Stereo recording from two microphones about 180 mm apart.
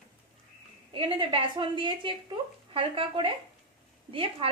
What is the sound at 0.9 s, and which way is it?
Speech, 25° right (ahead or behind).